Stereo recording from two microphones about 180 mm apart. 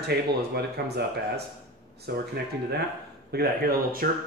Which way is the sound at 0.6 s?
65° right (ahead or behind).